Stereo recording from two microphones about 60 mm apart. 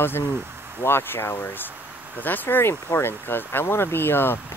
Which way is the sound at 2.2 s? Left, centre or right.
Left.